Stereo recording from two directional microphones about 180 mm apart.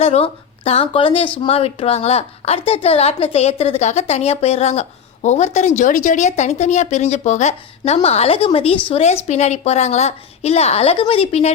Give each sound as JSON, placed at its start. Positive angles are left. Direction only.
{"t": 0.0, "sound": "a woman's voice", "side_deg": 35}